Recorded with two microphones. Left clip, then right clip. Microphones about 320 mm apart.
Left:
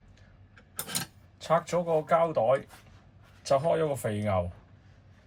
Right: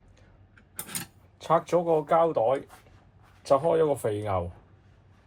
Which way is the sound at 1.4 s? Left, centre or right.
Centre.